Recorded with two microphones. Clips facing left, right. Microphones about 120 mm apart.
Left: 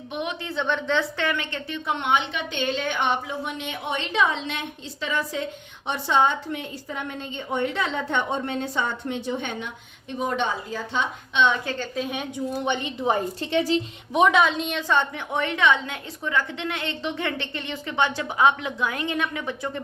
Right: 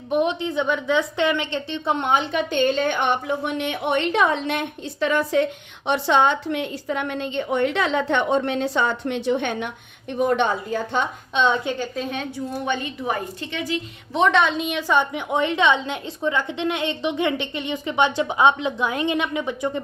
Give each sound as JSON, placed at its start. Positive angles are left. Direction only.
{"t": 0.1, "sound": "a woman's voice", "side_deg": -40}
{"t": 0.3, "sound": "a woman's voice", "side_deg": -15}
{"t": 11.9, "sound": "a woman's voice", "side_deg": 0}
{"t": 12.2, "sound": "a woman's voice", "side_deg": 15}
{"t": 14.1, "sound": "a woman's voice", "side_deg": 10}